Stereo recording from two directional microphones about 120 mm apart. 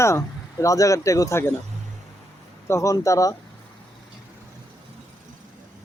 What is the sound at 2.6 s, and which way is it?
Speech, 25° left (ahead or behind).